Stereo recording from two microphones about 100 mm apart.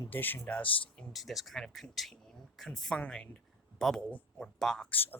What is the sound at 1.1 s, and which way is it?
Speech, centre (ahead or behind).